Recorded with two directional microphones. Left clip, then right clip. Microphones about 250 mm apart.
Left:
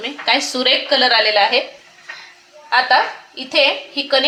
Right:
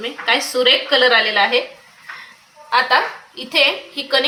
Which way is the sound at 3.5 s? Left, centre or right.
Left.